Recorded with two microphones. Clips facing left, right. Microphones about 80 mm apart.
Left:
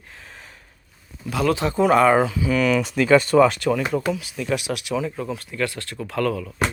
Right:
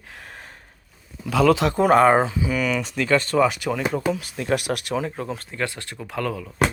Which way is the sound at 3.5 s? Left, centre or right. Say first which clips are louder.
Left 3 dB; centre.